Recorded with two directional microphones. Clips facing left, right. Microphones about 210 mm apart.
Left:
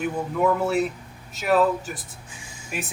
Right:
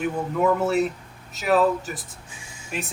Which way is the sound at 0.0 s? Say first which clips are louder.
Even; centre (ahead or behind).